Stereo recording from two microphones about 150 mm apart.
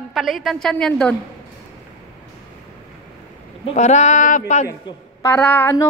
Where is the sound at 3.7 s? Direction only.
50° left (ahead or behind).